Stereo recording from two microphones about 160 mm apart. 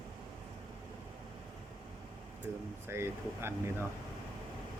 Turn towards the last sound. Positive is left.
turn(degrees=-15)  # may be behind; listen again after turning